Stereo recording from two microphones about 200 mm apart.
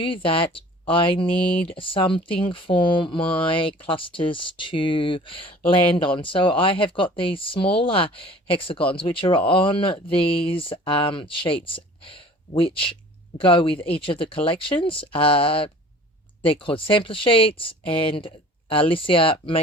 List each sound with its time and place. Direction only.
0.0 s speech: 25° left (ahead or behind)